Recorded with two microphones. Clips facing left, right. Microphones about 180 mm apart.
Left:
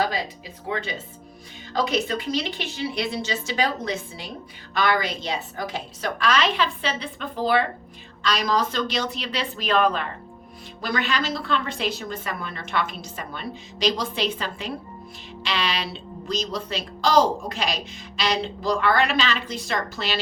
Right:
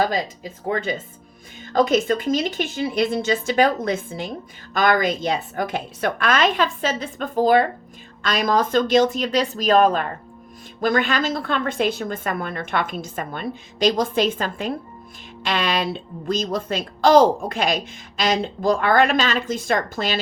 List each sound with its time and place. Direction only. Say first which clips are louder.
0.0 s a woman's voice: right 4 dB; 45° right (ahead or behind)